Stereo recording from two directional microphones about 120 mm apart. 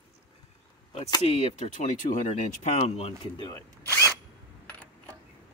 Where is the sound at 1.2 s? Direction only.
60° left (ahead or behind).